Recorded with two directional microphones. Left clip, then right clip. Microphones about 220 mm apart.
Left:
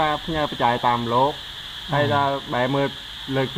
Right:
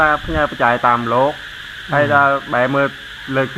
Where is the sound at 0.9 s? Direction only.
10° right (ahead or behind).